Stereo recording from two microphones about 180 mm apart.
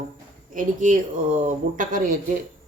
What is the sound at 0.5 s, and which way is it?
A woman's voice, 45° right (ahead or behind).